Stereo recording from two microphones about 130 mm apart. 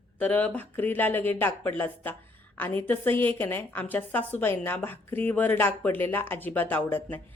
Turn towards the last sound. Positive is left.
turn(degrees=15)  # may be behind; listen again after turning